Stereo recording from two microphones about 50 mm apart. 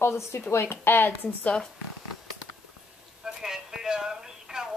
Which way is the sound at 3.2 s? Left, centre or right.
Centre.